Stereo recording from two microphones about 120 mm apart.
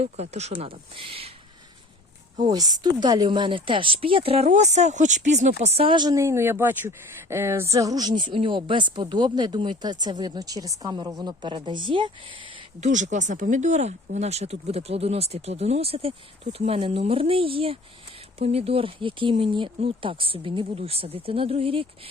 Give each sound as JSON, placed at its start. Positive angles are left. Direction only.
{"t": 0.0, "sound": "speech", "side_deg": -65}
{"t": 0.9, "sound": "speech", "side_deg": -50}
{"t": 2.5, "sound": "speech", "side_deg": -35}
{"t": 6.1, "sound": "speech", "side_deg": -20}
{"t": 12.8, "sound": "speech", "side_deg": -90}